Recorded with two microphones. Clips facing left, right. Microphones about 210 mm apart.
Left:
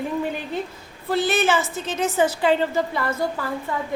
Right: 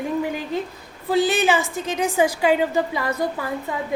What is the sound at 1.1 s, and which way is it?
A woman's voice, 15° right (ahead or behind).